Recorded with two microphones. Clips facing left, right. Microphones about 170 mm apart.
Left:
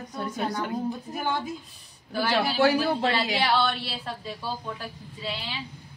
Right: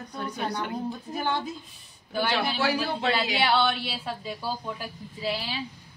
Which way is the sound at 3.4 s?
Centre (ahead or behind).